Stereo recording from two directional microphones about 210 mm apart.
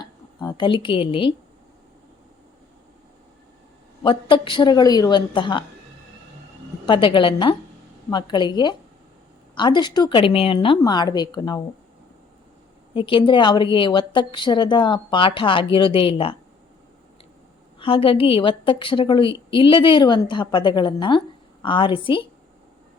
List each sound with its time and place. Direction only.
0.0 s speech: 20° left (ahead or behind)
4.0 s a woman's voice: 25° left (ahead or behind)
6.8 s a woman's voice: 20° left (ahead or behind)
12.9 s a woman's voice: 25° left (ahead or behind)
17.7 s a woman's voice: 25° left (ahead or behind)